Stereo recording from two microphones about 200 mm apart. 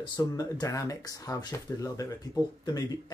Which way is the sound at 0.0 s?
20° left (ahead or behind).